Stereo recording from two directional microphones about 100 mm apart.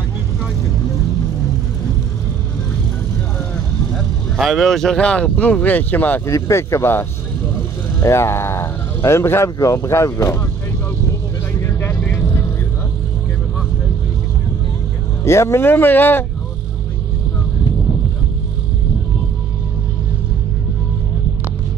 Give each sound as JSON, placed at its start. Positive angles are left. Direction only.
{"t": 3.9, "sound": "speech", "side_deg": 0}
{"t": 6.2, "sound": "speech", "side_deg": 30}
{"t": 11.6, "sound": "vehicle", "side_deg": 20}
{"t": 15.2, "sound": "speech", "side_deg": 25}